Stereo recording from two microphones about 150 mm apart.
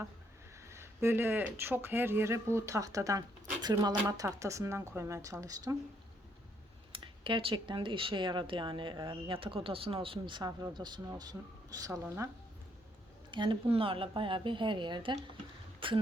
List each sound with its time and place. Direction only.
0.7 s speech: 15° right (ahead or behind)
6.9 s speech: 35° right (ahead or behind); by 12.3 s 15° right (ahead or behind)
13.3 s speech: 30° right (ahead or behind)